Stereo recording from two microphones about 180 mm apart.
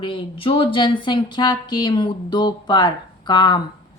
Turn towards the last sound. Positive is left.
turn(degrees=25)  # may be behind; listen again after turning